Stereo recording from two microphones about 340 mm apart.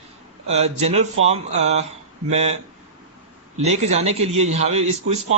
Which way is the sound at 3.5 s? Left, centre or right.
Centre.